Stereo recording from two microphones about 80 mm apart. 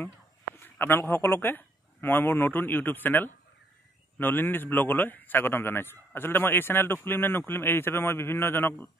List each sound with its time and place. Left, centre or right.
0.6 s a man's voice: left